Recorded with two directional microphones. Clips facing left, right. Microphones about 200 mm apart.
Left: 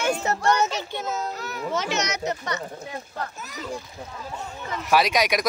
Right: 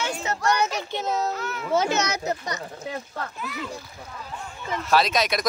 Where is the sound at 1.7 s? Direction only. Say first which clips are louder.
Right 4 dB; 35° right (ahead or behind).